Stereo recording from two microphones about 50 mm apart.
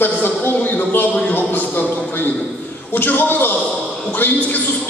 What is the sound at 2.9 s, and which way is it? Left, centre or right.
Speech, left.